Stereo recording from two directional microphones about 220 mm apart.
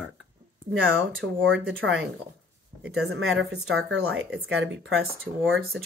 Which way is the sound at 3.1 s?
70° right (ahead or behind).